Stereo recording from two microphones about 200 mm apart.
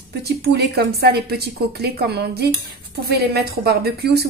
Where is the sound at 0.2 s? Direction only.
50° right (ahead or behind).